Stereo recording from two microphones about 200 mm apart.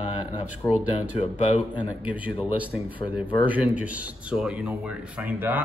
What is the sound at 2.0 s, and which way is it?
Speech, 5° right (ahead or behind).